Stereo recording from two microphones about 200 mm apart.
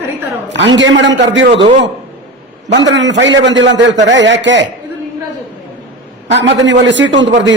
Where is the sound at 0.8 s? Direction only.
65° right (ahead or behind).